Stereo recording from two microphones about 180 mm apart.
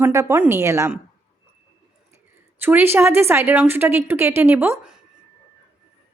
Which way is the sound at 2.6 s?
10° right (ahead or behind).